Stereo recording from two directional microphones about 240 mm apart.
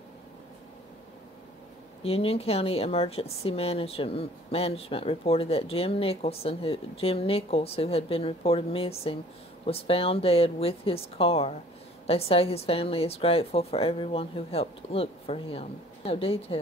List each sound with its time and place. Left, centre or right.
2.0 s speech: left